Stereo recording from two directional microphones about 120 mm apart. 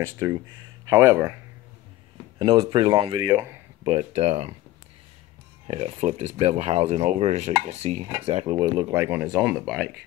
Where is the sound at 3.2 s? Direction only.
25° right (ahead or behind).